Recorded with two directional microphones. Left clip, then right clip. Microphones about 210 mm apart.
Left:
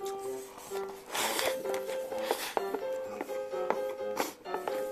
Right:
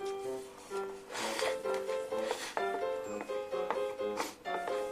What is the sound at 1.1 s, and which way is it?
Music, 45° left (ahead or behind).